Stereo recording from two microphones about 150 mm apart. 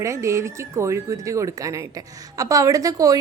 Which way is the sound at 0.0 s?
20° right (ahead or behind).